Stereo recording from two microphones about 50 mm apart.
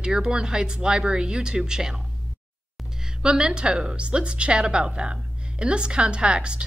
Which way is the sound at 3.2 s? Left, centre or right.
Centre.